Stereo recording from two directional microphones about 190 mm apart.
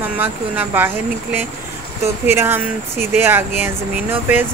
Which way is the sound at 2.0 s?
10° right (ahead or behind).